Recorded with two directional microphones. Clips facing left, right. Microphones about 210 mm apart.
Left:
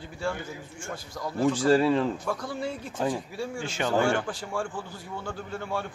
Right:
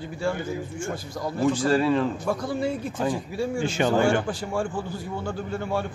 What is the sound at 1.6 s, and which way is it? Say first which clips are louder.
Speech: left 1 dB; 25° left (ahead or behind).